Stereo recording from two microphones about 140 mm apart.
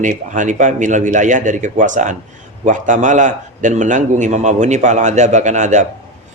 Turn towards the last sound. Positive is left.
turn(degrees=-60)  # may be behind; listen again after turning